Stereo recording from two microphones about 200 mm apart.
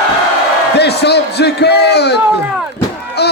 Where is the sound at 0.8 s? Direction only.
55° left (ahead or behind).